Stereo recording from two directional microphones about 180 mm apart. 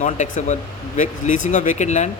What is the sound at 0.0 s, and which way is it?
A man's voice, 40° left (ahead or behind).